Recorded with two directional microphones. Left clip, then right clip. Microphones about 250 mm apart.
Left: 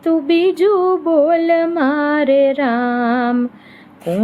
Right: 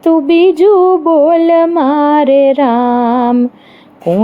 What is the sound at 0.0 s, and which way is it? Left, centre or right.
Mantra, right.